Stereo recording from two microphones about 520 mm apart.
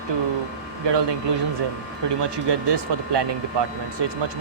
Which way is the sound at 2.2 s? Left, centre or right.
Right.